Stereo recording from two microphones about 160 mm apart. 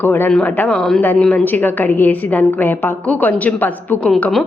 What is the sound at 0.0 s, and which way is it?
A woman's voice, 15° left (ahead or behind).